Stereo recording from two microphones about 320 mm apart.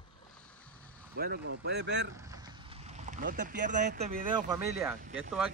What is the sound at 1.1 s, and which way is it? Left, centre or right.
Speech, right.